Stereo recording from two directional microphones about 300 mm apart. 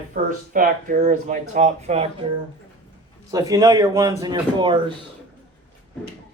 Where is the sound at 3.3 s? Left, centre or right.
Centre.